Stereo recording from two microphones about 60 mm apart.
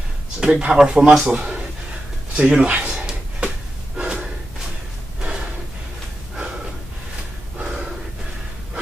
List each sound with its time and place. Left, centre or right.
0.4 s speech: centre
2.3 s gasp: centre
7.5 s gasp: centre